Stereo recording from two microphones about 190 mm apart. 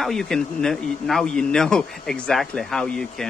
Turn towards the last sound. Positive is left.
turn(degrees=5)  # may be behind; listen again after turning